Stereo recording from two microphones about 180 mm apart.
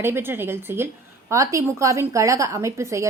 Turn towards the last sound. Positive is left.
turn(degrees=-15)  # may be behind; listen again after turning